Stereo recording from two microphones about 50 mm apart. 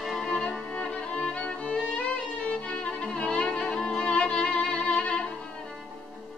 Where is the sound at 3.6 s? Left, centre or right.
Centre; by 5.2 s left.